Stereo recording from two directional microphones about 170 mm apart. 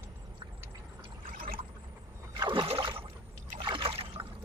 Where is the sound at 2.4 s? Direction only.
25° right (ahead or behind).